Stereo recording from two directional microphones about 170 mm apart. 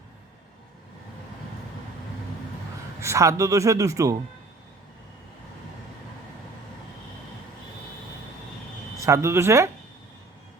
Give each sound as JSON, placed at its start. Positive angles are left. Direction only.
{"t": 3.0, "sound": "speech", "side_deg": -15}
{"t": 9.0, "sound": "speech", "side_deg": -20}